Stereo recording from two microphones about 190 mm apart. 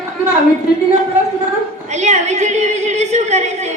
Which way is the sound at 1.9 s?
35° right (ahead or behind).